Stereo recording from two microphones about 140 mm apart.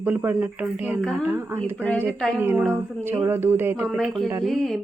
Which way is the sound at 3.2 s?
15° right (ahead or behind).